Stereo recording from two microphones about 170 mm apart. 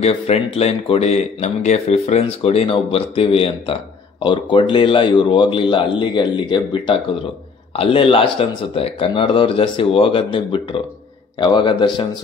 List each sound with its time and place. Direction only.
0.0 s speech: 35° left (ahead or behind)